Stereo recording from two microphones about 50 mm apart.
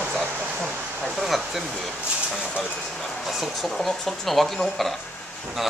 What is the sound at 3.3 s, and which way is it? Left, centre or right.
Speech, centre.